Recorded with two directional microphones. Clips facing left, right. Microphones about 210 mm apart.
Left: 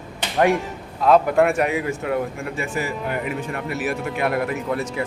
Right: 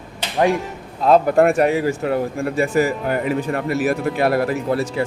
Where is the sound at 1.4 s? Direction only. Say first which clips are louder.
Right 4 dB; 35° right (ahead or behind).